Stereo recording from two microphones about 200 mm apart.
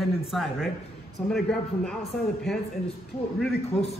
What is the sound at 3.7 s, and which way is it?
Speech, 30° left (ahead or behind).